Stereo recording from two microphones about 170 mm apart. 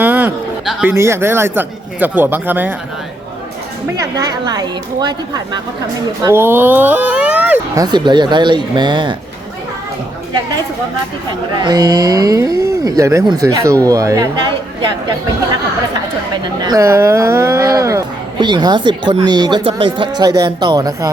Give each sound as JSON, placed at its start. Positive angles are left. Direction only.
{"t": 0.0, "sound": "a sound", "side_deg": -10}
{"t": 0.9, "sound": "speech", "side_deg": -15}
{"t": 4.4, "sound": "speech", "side_deg": -25}
{"t": 6.2, "sound": "speech", "side_deg": -15}
{"t": 7.8, "sound": "speech", "side_deg": -25}
{"t": 11.3, "sound": "speech", "side_deg": -25}
{"t": 16.6, "sound": "speech", "side_deg": -20}